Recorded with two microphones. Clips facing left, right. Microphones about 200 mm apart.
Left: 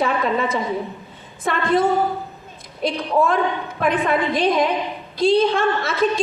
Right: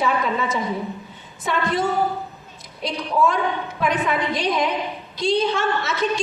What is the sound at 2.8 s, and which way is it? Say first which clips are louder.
A woman's voice: left 2 dB; 55° left (ahead or behind).